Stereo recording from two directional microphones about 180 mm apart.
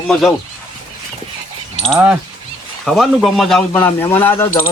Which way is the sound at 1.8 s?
5° right (ahead or behind).